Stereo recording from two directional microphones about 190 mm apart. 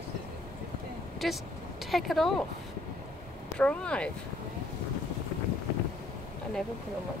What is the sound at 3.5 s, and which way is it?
Speech, 5° left (ahead or behind).